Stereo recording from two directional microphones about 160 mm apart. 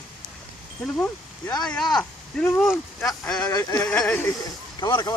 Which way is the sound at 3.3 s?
25° left (ahead or behind).